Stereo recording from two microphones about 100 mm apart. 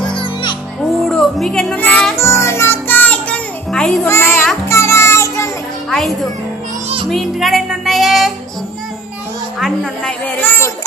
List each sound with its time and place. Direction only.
0.0 s music: 55° left (ahead or behind)
0.8 s music: 5° left (ahead or behind)
1.7 s music: 15° left (ahead or behind)
2.1 s music: 25° left (ahead or behind); by 4.0 s 5° left (ahead or behind)
4.0 s children playing: 25° left (ahead or behind)
4.7 s music: 25° left (ahead or behind)
5.9 s music: 5° left (ahead or behind)
9.6 s speech: 5° left (ahead or behind); by 10.7 s 20° left (ahead or behind)